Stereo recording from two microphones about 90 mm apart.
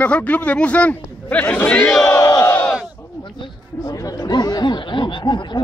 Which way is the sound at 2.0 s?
40° left (ahead or behind).